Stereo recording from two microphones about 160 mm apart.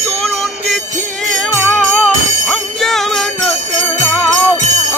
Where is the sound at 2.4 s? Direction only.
Centre (ahead or behind).